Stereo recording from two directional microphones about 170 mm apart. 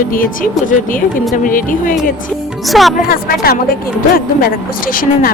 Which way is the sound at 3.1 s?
60° left (ahead or behind).